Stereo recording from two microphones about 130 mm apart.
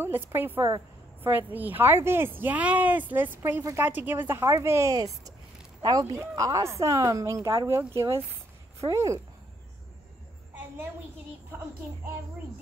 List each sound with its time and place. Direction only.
0.0 s speech: 15° right (ahead or behind)